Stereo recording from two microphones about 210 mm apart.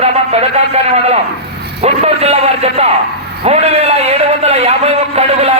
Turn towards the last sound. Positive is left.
turn(degrees=-30)  # may be behind; listen again after turning